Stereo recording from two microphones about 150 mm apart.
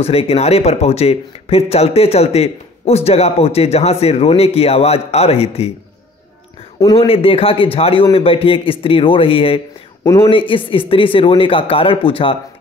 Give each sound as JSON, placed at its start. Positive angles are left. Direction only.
{"t": 0.0, "sound": "speech", "side_deg": 40}
{"t": 7.0, "sound": "a man's voice", "side_deg": 40}
{"t": 10.0, "sound": "speech", "side_deg": 25}
{"t": 10.3, "sound": "a man's voice", "side_deg": 35}